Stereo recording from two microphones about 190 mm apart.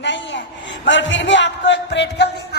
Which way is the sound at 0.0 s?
70° left (ahead or behind).